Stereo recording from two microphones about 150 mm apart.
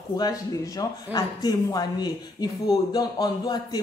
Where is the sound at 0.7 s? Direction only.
25° left (ahead or behind).